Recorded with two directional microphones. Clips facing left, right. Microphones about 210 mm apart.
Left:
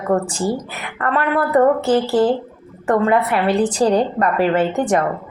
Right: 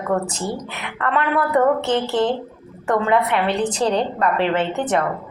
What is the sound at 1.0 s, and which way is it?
Speech, 40° left (ahead or behind).